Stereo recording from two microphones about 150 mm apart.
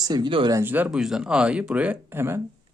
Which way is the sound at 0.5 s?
15° right (ahead or behind).